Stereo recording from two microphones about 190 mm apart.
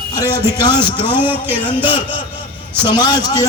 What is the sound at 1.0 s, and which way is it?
Speech, 10° right (ahead or behind).